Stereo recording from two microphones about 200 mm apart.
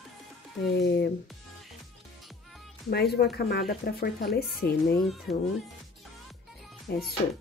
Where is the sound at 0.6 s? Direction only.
55° left (ahead or behind).